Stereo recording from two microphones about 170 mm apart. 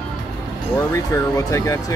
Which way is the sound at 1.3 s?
15° left (ahead or behind).